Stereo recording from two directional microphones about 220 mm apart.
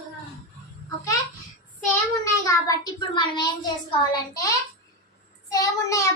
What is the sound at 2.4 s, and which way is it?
A child's voice, 20° left (ahead or behind).